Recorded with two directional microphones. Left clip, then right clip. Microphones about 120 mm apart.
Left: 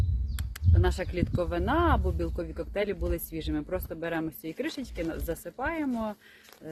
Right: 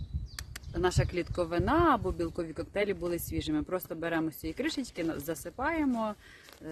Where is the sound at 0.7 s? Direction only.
35° right (ahead or behind).